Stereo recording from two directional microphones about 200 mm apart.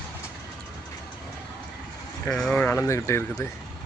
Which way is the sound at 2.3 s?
5° left (ahead or behind).